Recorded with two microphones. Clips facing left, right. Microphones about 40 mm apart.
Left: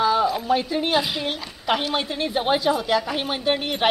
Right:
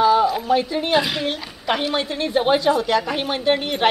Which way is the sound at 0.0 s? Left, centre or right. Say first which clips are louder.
Right 4 dB; centre.